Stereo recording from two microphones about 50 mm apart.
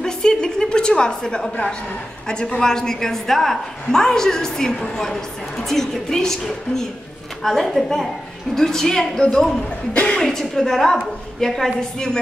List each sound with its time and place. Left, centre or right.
0.0 s a sound: centre
2.2 s a woman's voice: centre
10.2 s a woman's voice: centre